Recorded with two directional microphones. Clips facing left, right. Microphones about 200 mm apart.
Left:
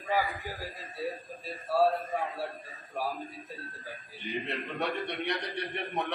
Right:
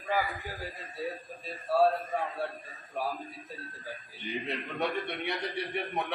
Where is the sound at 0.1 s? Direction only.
Centre (ahead or behind).